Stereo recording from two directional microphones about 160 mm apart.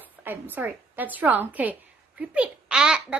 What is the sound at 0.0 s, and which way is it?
A woman's voice, 10° right (ahead or behind).